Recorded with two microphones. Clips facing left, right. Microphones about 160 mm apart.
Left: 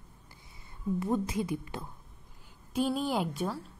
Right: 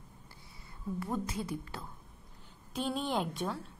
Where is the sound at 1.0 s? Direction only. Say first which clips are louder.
Left 5 dB; 20° left (ahead or behind).